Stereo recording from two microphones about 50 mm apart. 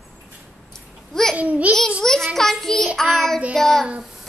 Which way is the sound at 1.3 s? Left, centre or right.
Right.